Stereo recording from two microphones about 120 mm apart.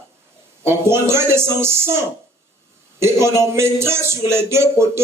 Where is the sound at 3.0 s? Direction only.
25° right (ahead or behind).